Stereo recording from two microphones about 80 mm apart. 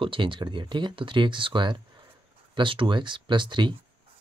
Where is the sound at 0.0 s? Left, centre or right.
Right.